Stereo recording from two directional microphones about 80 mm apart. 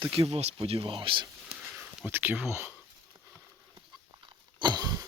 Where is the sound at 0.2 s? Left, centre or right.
Right.